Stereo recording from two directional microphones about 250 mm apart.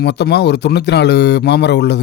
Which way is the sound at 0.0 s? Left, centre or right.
Left.